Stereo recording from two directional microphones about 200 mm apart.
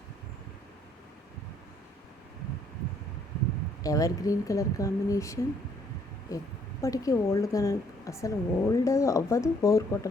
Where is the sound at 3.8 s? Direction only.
15° left (ahead or behind).